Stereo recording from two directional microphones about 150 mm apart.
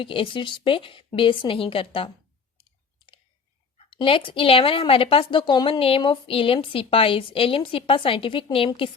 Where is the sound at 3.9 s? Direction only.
35° left (ahead or behind).